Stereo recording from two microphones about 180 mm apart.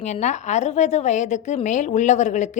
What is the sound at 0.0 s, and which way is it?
A woman's voice, 40° left (ahead or behind).